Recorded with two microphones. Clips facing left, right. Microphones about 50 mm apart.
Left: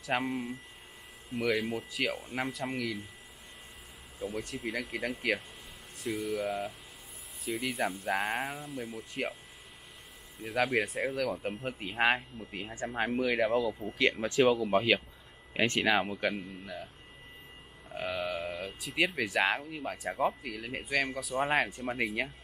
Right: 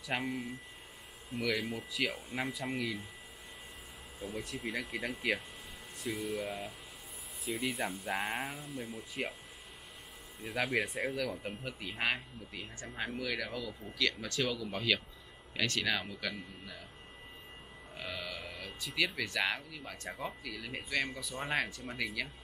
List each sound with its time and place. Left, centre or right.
0.0 s speech: centre
4.2 s speech: centre
10.4 s speech: centre
12.0 s speech: left
18.1 s speech: left
18.7 s speech: centre
18.9 s speech: left
21.2 s speech: centre
21.6 s speech: left